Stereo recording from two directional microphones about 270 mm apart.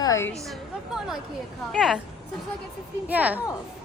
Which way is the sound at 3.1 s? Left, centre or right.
Centre.